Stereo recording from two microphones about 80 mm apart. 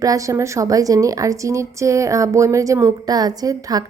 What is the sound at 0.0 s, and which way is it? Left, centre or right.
A woman's voice, right.